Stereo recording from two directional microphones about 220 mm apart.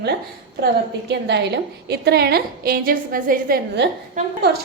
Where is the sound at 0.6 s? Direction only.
50° right (ahead or behind).